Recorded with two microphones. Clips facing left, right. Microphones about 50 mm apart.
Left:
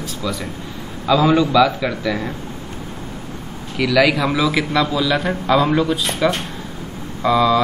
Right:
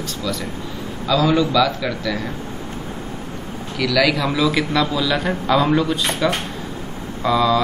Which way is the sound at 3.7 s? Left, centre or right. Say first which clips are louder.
Left 2 dB; centre.